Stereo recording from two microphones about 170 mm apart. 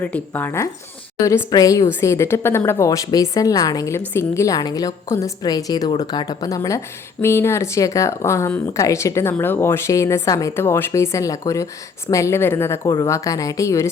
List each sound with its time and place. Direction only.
0.0 s a woman's voice: 10° left (ahead or behind)